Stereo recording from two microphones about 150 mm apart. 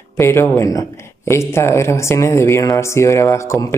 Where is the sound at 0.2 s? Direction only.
15° left (ahead or behind).